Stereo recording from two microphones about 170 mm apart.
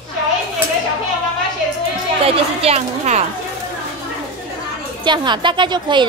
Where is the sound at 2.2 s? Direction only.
35° right (ahead or behind).